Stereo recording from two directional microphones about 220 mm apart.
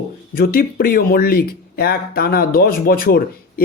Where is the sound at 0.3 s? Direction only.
40° left (ahead or behind).